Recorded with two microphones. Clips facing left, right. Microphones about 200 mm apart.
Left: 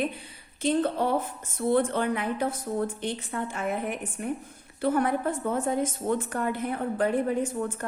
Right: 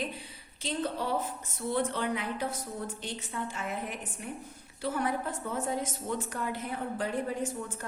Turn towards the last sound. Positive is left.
turn(degrees=55)  # may be behind; listen again after turning